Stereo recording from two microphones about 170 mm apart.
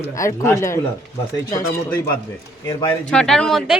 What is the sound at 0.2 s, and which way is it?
Speech, 15° left (ahead or behind).